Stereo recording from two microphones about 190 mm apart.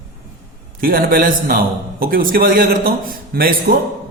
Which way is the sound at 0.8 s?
50° right (ahead or behind).